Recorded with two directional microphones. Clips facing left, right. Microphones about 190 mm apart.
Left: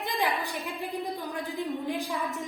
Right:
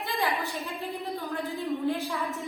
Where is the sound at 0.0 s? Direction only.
15° left (ahead or behind).